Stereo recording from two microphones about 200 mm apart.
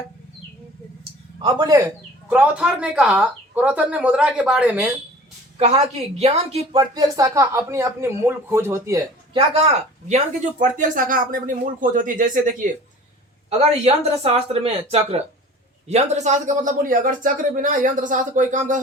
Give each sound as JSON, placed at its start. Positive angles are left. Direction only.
{"t": 1.4, "sound": "a man's voice", "side_deg": -20}
{"t": 2.3, "sound": "speech", "side_deg": -5}
{"t": 5.5, "sound": "a woman's voice", "side_deg": -30}
{"t": 10.6, "sound": "speech", "side_deg": -40}